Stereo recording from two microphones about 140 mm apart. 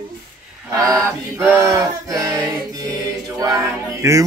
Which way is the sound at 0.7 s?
25° right (ahead or behind).